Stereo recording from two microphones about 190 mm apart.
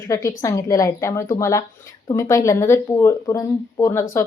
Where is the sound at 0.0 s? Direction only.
15° left (ahead or behind).